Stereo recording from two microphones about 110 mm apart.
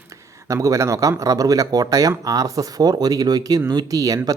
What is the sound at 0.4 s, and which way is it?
Speech, 30° right (ahead or behind).